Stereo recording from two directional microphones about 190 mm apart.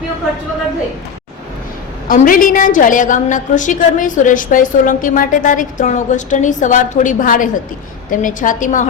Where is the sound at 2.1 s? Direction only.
45° left (ahead or behind).